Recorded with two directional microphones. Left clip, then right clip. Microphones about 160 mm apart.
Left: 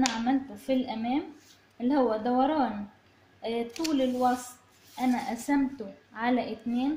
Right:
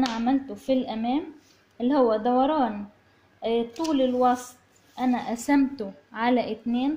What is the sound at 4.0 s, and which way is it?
A woman's voice, 40° right (ahead or behind).